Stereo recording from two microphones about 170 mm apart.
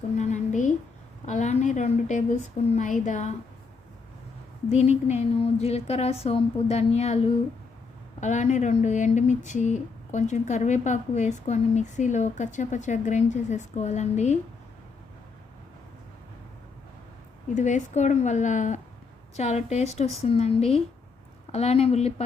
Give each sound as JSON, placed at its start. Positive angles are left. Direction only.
{"t": 0.2, "sound": "a sound", "side_deg": 45}
{"t": 1.2, "sound": "a woman's voice", "side_deg": 45}
{"t": 4.7, "sound": "a woman's voice", "side_deg": 40}
{"t": 17.5, "sound": "a woman's voice", "side_deg": 45}